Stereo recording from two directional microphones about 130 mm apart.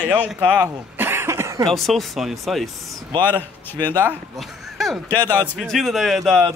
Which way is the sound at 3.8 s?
35° right (ahead or behind).